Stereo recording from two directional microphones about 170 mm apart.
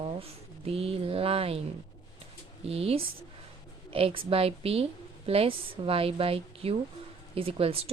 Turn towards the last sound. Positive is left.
turn(degrees=-35)  # may be behind; listen again after turning